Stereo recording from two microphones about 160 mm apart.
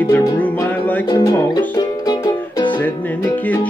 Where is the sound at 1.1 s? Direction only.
25° left (ahead or behind).